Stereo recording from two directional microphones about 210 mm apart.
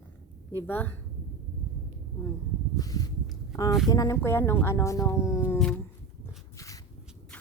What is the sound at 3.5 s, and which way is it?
Speech, 15° left (ahead or behind).